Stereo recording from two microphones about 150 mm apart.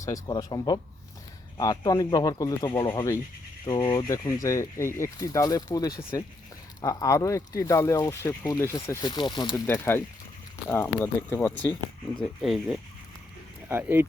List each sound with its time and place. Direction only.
0.0 s speech: 25° left (ahead or behind)
9.6 s speech: 15° left (ahead or behind)
12.2 s speech: centre (ahead or behind)